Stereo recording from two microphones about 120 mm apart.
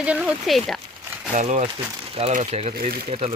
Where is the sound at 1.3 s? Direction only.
80° right.